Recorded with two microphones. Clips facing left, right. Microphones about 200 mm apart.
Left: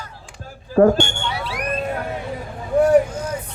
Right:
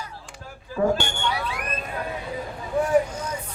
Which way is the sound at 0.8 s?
55° left (ahead or behind).